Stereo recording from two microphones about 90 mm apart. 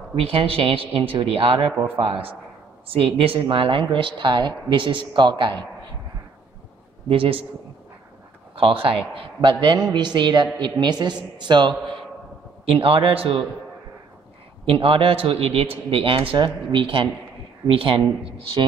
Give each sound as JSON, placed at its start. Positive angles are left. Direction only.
{"t": 0.1, "sound": "speech", "side_deg": -80}
{"t": 7.1, "sound": "speech", "side_deg": -90}
{"t": 8.5, "sound": "a man's voice", "side_deg": -80}
{"t": 12.6, "sound": "speech", "side_deg": -90}
{"t": 14.7, "sound": "speech", "side_deg": -90}
{"t": 16.3, "sound": "a man's voice", "side_deg": -60}